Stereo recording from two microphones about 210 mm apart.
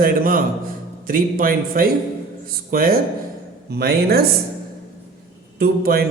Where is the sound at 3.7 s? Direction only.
50° right (ahead or behind).